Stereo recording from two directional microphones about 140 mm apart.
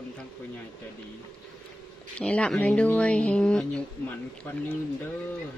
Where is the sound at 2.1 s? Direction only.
5° left (ahead or behind).